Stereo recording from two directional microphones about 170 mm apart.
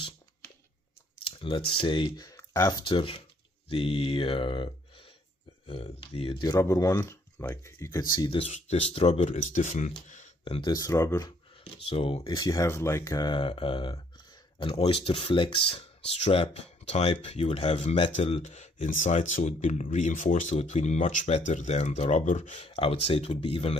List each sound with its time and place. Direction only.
1.2 s speech: 30° left (ahead or behind)
2.9 s speech: 30° left (ahead or behind)
6.4 s speech: 20° left (ahead or behind); by 10.3 s 45° left (ahead or behind)
10.4 s speech: 30° left (ahead or behind)
11.6 s speech: 35° left (ahead or behind)
12.2 s speech: 25° left (ahead or behind)